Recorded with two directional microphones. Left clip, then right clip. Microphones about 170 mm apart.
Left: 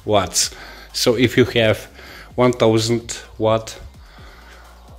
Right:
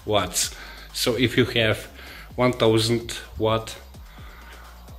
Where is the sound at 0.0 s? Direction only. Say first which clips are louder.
Left 6 dB; 35° left (ahead or behind).